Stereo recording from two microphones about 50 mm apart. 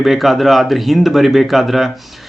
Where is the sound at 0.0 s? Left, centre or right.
Centre.